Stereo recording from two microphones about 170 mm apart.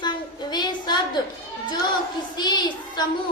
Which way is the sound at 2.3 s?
25° left (ahead or behind).